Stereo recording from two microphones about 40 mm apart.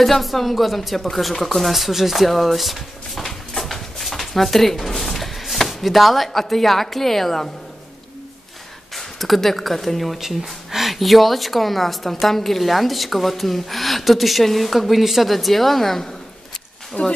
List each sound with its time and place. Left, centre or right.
0.0 s speech: centre
8.9 s speech: centre
17.0 s speech: left